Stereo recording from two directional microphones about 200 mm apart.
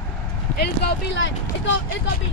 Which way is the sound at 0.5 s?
55° left (ahead or behind).